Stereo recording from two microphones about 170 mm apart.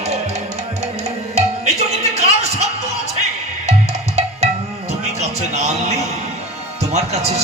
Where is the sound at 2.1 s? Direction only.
40° right (ahead or behind).